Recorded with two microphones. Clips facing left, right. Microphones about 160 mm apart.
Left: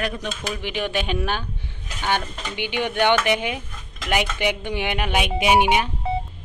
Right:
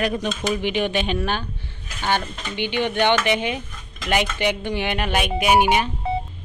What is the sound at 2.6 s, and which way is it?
Speech, 10° left (ahead or behind).